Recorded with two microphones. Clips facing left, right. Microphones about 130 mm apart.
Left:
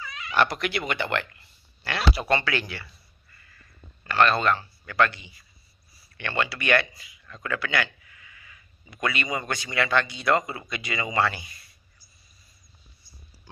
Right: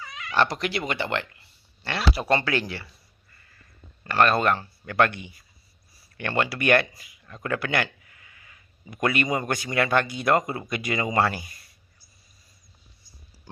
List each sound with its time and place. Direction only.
0.4 s speech: 30° right (ahead or behind)
4.0 s speech: 40° right (ahead or behind)
6.1 s speech: 45° right (ahead or behind)